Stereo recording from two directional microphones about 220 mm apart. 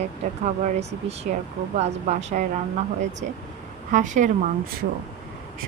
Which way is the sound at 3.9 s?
35° right (ahead or behind).